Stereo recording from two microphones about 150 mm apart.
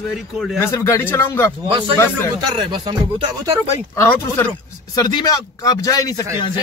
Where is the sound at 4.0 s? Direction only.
15° left (ahead or behind).